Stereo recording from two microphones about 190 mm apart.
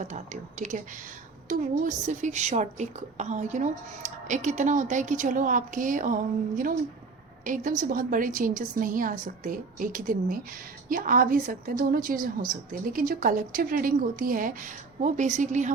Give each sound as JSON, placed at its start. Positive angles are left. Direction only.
{"t": 1.5, "sound": "a woman's voice", "side_deg": -45}
{"t": 7.4, "sound": "a woman's voice", "side_deg": -45}